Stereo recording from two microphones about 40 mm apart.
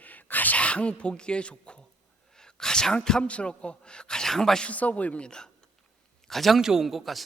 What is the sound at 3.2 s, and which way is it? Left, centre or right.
A man's voice, left.